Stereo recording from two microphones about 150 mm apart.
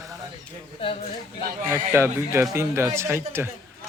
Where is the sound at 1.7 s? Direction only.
15° right (ahead or behind).